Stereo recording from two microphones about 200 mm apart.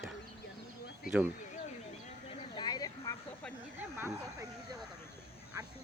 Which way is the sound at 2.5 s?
20° left (ahead or behind).